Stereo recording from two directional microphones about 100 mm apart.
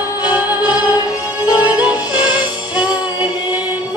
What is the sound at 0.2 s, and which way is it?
Music, 40° left (ahead or behind).